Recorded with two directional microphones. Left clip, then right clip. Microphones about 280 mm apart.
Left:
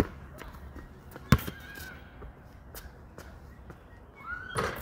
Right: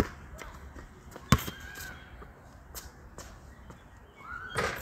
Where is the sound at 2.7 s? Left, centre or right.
Centre.